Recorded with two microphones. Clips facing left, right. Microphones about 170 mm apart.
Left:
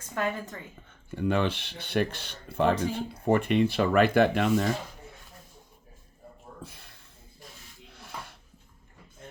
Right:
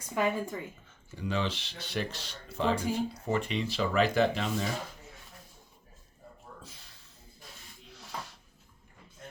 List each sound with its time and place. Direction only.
0.0 s a woman's voice: 10° right (ahead or behind)
1.1 s speech: 55° left (ahead or behind)
6.6 s a sound: 55° left (ahead or behind)